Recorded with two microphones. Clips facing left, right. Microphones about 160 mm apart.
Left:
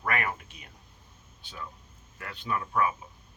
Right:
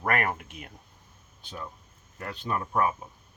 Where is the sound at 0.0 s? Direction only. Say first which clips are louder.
Right 3 dB; 45° right (ahead or behind).